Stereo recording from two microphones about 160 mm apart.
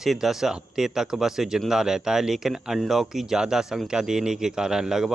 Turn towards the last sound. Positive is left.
turn(degrees=-5)  # may be behind; listen again after turning